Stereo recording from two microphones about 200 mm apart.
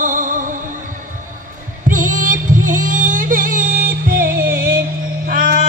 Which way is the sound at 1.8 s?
40° right (ahead or behind).